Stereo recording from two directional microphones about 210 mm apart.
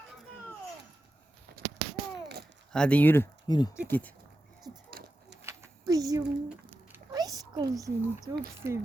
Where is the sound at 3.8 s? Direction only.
10° left (ahead or behind).